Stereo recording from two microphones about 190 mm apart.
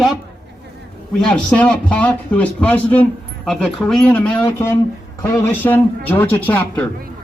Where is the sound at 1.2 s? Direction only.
5° left (ahead or behind).